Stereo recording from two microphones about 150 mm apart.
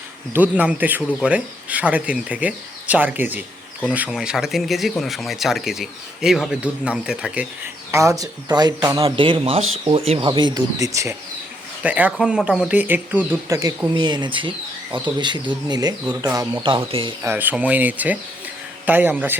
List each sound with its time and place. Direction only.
0.3 s speech: 10° right (ahead or behind)
7.9 s speech: 20° right (ahead or behind)
11.8 s speech: 10° right (ahead or behind)
13.5 s speech: 25° right (ahead or behind)
16.6 s speech: 35° right (ahead or behind)
17.2 s speech: 10° right (ahead or behind)